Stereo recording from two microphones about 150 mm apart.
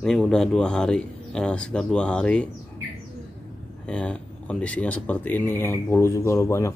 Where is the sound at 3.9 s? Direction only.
5° left (ahead or behind).